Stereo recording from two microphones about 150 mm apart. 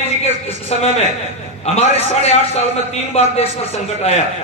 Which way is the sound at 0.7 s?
45° left (ahead or behind).